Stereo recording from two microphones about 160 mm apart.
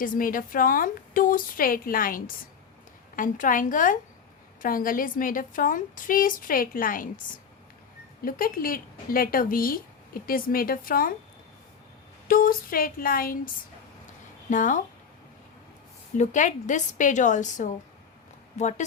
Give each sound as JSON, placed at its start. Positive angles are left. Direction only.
{"t": 0.0, "sound": "a woman's voice", "side_deg": 60}
{"t": 8.2, "sound": "a woman's voice", "side_deg": 65}
{"t": 12.3, "sound": "a woman's voice", "side_deg": 65}
{"t": 14.5, "sound": "a woman's voice", "side_deg": 50}
{"t": 16.1, "sound": "a woman's voice", "side_deg": 50}